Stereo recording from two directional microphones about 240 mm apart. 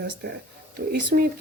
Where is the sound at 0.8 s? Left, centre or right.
Right.